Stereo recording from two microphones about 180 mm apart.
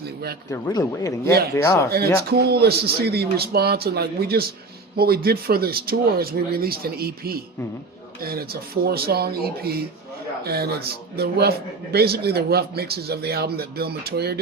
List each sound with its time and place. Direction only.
0.5 s speech: 20° left (ahead or behind)
2.3 s a man's voice: 60° right (ahead or behind)